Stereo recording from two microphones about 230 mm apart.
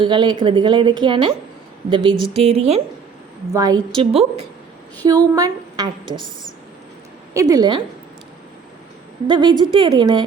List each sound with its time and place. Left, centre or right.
0.0 s a woman's voice: right
3.5 s a woman's voice: centre
5.0 s a woman's voice: centre
7.3 s a woman's voice: centre
9.2 s a woman's voice: right